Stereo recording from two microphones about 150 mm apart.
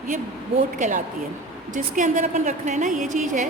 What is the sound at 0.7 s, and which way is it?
A woman's voice, 55° right (ahead or behind).